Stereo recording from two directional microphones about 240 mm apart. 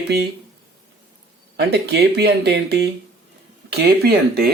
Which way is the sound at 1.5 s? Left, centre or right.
Right.